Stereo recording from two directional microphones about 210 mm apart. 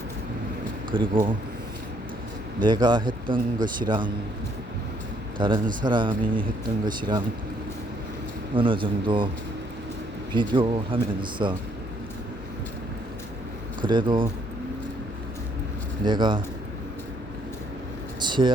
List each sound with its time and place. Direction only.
0.9 s speech: 25° right (ahead or behind)
2.6 s speech: 20° right (ahead or behind)
5.4 s speech: 20° right (ahead or behind)
8.5 s speech: 25° right (ahead or behind)
10.3 s speech: 25° right (ahead or behind)
13.8 s speech: 20° right (ahead or behind)
16.0 s speech: 20° right (ahead or behind)
18.2 s a sound: 20° right (ahead or behind)